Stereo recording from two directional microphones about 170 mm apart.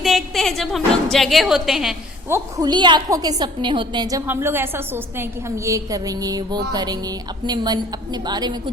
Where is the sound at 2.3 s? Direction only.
25° right (ahead or behind).